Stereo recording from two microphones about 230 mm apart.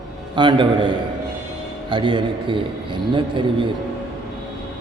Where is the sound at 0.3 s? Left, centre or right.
Right.